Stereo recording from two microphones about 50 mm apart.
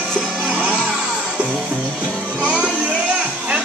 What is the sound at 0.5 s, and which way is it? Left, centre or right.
Music, right.